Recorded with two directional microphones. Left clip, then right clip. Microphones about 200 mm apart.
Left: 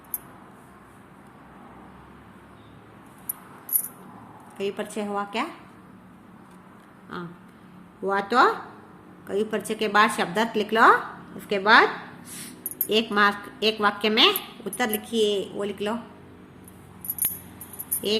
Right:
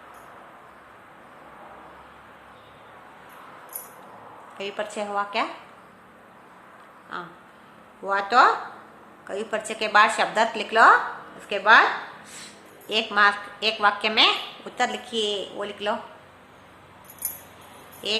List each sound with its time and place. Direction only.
4.5 s a woman's voice: 30° left (ahead or behind)
7.1 s a sound: 35° left (ahead or behind)
8.0 s a woman's voice: 35° left (ahead or behind)
12.9 s a woman's voice: 35° left (ahead or behind)
18.0 s a woman's voice: 35° left (ahead or behind)